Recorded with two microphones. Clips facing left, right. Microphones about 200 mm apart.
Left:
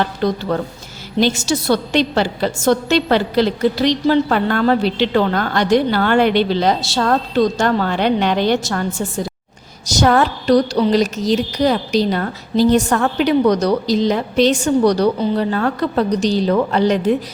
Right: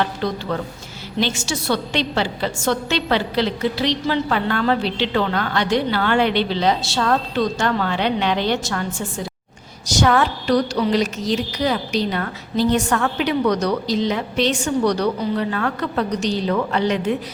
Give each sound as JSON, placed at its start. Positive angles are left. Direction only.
{"t": 0.5, "sound": "a woman's voice", "side_deg": 45}